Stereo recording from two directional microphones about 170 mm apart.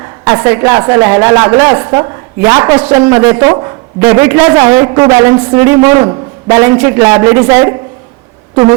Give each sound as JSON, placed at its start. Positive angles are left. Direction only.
{"t": 0.3, "sound": "a woman's voice", "side_deg": -15}